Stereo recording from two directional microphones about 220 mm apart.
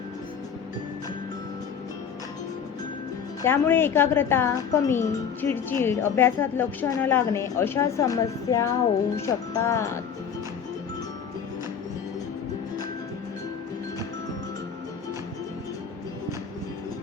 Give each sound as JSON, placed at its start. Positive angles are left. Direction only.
{"t": 3.4, "sound": "a woman's voice", "side_deg": 10}